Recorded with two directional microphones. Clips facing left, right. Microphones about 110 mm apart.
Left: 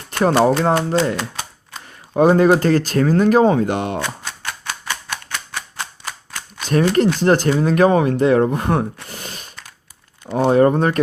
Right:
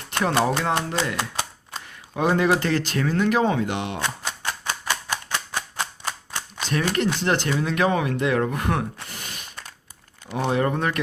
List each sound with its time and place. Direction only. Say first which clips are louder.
0.2 s speech: left 7 dB; 35° left (ahead or behind)
2.1 s speech: left 8 dB; 40° left (ahead or behind)
6.7 s speech: left 8 dB; 40° left (ahead or behind)